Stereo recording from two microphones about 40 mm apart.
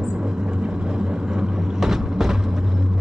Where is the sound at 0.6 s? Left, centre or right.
Centre.